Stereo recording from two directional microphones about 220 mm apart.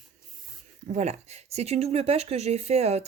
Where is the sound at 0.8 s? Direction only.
30° right (ahead or behind).